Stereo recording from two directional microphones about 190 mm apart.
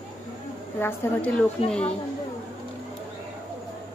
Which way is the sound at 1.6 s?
30° left (ahead or behind).